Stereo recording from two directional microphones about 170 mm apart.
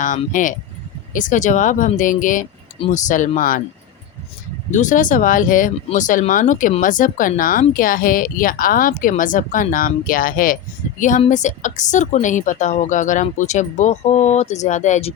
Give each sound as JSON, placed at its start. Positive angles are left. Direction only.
{"t": 0.3, "sound": "speech", "side_deg": 50}
{"t": 2.7, "sound": "speech", "side_deg": 30}
{"t": 3.1, "sound": "speech", "side_deg": 50}
{"t": 4.7, "sound": "speech", "side_deg": 45}